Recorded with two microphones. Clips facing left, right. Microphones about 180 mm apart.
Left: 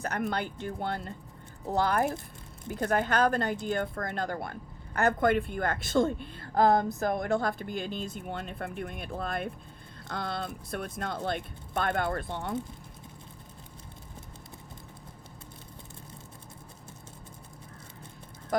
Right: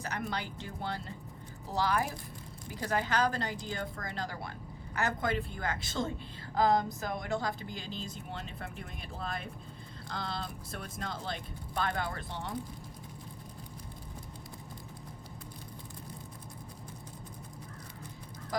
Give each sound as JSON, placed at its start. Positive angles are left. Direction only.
{"t": 0.0, "sound": "speech", "side_deg": 55}